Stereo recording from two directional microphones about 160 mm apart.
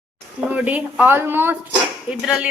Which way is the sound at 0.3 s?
10° right (ahead or behind).